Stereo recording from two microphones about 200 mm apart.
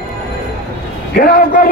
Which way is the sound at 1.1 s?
45° left (ahead or behind).